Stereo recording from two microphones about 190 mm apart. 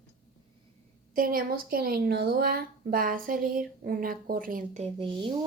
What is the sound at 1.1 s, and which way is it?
Speech, 50° right (ahead or behind).